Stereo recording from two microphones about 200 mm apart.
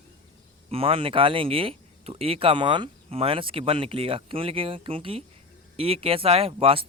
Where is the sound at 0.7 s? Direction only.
30° right (ahead or behind).